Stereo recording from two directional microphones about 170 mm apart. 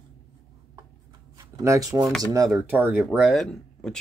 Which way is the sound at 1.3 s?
20° right (ahead or behind).